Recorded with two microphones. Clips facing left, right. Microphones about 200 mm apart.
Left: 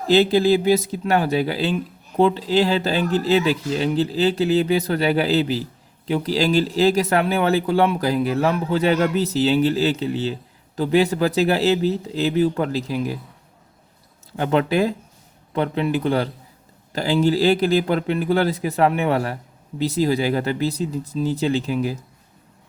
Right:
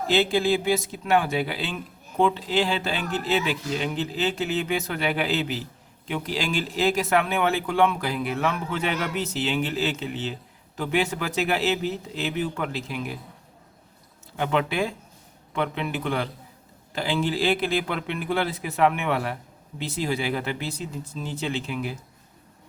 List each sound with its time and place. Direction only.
0.1 s speech: 40° left (ahead or behind)
14.3 s speech: 40° left (ahead or behind)